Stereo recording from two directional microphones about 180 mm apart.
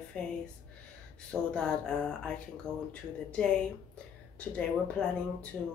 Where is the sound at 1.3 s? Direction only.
5° left (ahead or behind).